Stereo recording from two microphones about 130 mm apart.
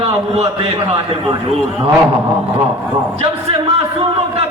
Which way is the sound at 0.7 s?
35° right (ahead or behind).